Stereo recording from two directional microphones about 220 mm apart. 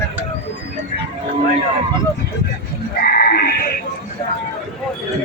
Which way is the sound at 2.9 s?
45° left (ahead or behind).